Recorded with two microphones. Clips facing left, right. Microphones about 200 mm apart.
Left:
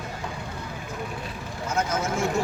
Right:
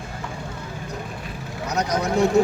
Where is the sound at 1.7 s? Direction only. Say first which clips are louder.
Right 3 dB; 40° right (ahead or behind).